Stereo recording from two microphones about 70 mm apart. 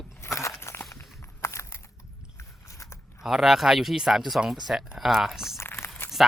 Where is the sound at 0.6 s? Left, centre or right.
Left.